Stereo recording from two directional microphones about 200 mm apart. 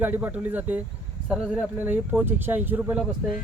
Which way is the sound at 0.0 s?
10° right (ahead or behind).